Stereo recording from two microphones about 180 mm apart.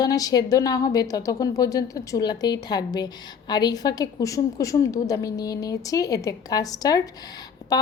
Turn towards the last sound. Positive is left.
turn(degrees=20)  # may be behind; listen again after turning